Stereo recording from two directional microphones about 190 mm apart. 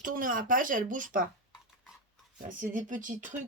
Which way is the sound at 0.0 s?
45° right (ahead or behind).